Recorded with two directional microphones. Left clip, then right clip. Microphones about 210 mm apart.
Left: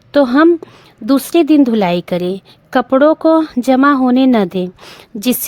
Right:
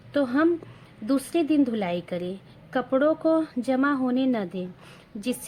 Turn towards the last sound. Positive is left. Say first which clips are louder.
# left 13 dB
turn(degrees=50)  # may be behind; listen again after turning